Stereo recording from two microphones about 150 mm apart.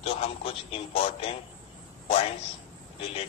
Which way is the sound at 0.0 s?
40° left (ahead or behind).